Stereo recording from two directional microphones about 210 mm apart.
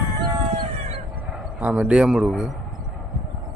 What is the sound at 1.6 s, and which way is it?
Speech, 5° right (ahead or behind).